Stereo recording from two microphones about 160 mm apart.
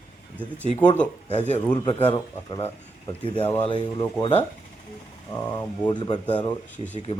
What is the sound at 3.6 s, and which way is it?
Speech, 25° left (ahead or behind).